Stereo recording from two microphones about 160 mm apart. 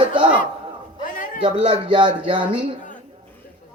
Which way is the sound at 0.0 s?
30° right (ahead or behind).